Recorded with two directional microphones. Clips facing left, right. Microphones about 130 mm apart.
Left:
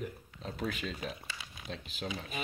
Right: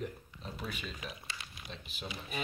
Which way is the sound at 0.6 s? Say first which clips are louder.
Left 6 dB; 90° left.